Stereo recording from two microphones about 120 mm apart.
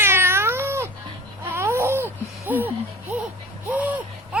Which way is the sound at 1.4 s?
20° right (ahead or behind).